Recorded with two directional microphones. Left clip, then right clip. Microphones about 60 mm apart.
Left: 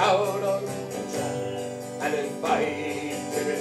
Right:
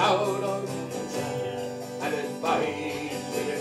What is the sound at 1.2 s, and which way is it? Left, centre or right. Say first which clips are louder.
Music: left 1 dB; left.